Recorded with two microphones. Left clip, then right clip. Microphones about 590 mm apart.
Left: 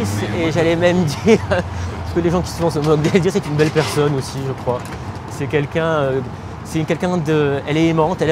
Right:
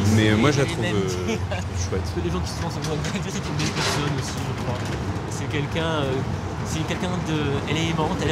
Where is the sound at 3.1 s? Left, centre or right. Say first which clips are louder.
Left 16 dB; left.